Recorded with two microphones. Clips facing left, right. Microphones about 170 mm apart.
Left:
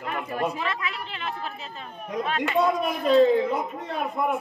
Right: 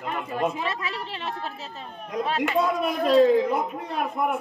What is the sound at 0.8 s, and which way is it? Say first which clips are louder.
A woman's voice: right 1 dB; 35° right (ahead or behind).